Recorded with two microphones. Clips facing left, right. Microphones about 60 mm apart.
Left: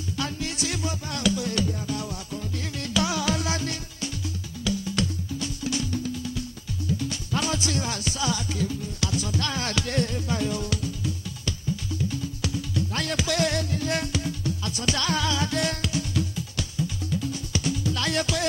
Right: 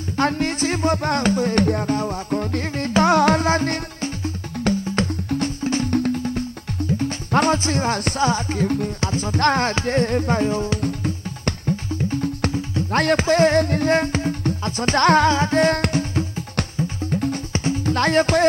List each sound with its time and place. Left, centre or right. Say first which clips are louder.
0.2 s music: right 11 dB; right
5.9 s music: right 9 dB; right
9.0 s music: right 5 dB; right
9.4 s music: right 12 dB; right
9.7 s music: right 7 dB; right
10.8 s music: right 7 dB; right
15.7 s music: right 7 dB; right